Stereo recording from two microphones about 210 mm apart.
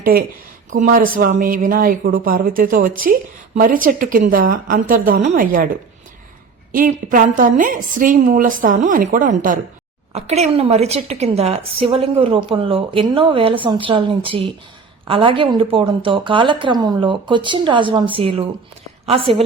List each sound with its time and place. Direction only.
0.0 s speech: 45° right (ahead or behind)
6.7 s a woman's voice: 40° right (ahead or behind)